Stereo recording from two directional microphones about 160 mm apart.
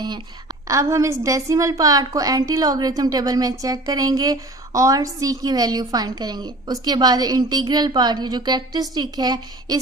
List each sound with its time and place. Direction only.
0.7 s a woman's voice: 20° right (ahead or behind)